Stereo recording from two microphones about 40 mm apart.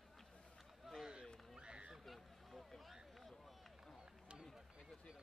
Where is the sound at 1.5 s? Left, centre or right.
Right.